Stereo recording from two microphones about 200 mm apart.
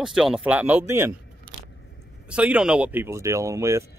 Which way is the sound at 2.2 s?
5° right (ahead or behind).